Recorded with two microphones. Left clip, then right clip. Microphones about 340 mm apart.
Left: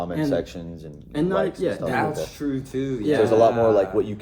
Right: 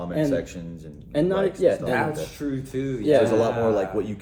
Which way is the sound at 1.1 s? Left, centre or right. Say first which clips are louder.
Right 1 dB; centre.